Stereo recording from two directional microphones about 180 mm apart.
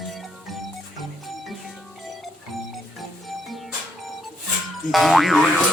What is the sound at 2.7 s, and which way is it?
Music, centre (ahead or behind).